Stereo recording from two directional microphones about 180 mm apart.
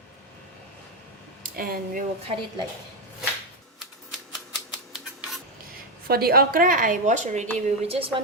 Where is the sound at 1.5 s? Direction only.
55° right (ahead or behind).